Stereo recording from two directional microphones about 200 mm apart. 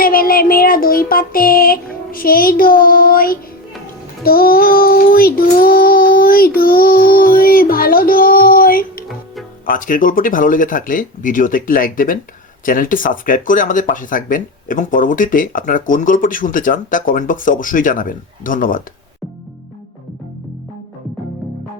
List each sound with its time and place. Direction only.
0.0 s speech: 45° left (ahead or behind)